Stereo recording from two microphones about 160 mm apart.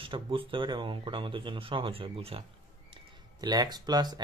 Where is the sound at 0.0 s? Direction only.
35° right (ahead or behind).